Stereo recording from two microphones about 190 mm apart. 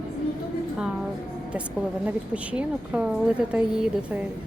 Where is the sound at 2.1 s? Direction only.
5° right (ahead or behind).